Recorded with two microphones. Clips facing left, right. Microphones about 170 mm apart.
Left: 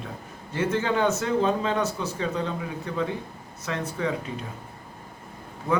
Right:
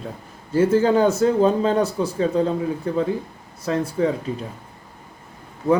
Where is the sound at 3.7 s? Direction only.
35° right (ahead or behind).